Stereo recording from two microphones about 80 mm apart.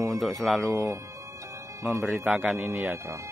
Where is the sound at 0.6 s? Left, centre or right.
Right.